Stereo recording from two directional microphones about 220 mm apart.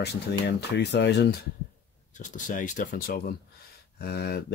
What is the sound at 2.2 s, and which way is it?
Speech, 35° left (ahead or behind).